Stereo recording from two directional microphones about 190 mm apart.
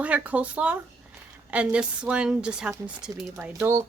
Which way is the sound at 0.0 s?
5° right (ahead or behind).